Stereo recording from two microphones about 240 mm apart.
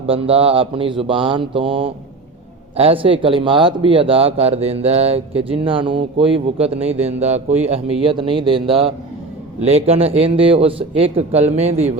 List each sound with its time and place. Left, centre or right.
0.1 s speech: right